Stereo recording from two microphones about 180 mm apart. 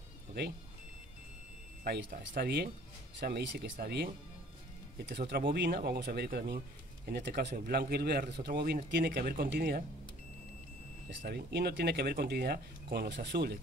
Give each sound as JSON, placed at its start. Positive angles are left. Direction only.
{"t": 1.9, "sound": "speech", "side_deg": -50}
{"t": 5.0, "sound": "speech", "side_deg": -75}
{"t": 11.2, "sound": "speech", "side_deg": -65}